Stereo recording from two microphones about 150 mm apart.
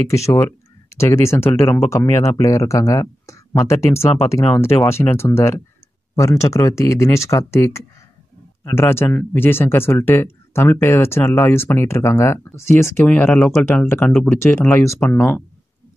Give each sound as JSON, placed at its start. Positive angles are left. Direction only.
{"t": 0.9, "sound": "speech", "side_deg": 20}
{"t": 4.0, "sound": "speech", "side_deg": 40}
{"t": 4.3, "sound": "speech", "side_deg": 20}